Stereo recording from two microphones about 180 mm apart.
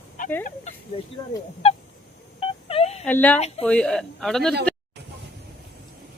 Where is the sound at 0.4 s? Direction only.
40° left (ahead or behind).